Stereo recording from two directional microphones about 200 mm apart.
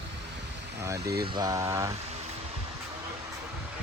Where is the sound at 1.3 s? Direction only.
20° right (ahead or behind).